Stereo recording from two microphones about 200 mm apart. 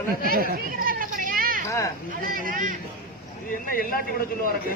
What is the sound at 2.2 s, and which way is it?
Speech, 45° right (ahead or behind).